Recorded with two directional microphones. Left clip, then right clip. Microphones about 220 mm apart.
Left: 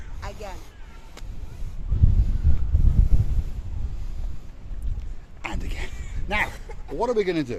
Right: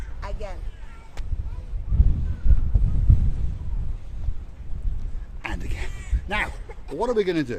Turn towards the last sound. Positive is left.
turn(degrees=-5)  # may be behind; listen again after turning